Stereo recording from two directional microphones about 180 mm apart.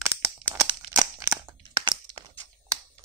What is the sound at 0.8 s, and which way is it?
Crumpling, 25° right (ahead or behind).